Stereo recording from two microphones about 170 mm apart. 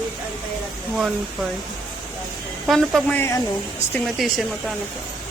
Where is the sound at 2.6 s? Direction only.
Centre (ahead or behind).